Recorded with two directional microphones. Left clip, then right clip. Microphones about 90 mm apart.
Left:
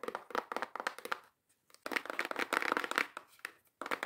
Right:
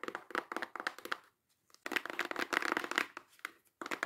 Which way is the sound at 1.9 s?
15° left (ahead or behind).